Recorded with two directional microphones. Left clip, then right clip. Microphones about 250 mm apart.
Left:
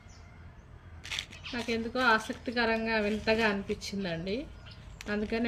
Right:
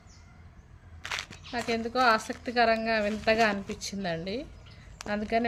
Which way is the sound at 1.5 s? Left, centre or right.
Right.